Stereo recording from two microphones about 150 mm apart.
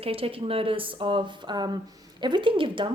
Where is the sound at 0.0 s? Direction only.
40° right (ahead or behind).